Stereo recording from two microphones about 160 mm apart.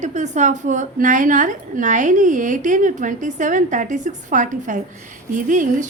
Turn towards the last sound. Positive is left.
turn(degrees=-50)  # may be behind; listen again after turning